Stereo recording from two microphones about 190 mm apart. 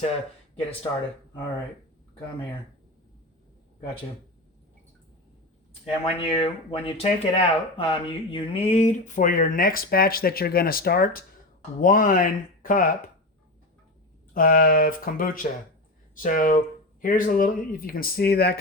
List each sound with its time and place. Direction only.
5.8 s speech: 30° left (ahead or behind); by 12.9 s 45° left (ahead or behind)
14.3 s speech: 50° left (ahead or behind)